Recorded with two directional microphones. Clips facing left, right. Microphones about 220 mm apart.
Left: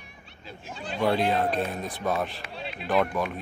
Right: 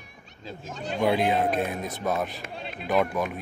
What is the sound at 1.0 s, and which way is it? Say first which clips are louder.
Speech: right 1 dB; 10° right (ahead or behind).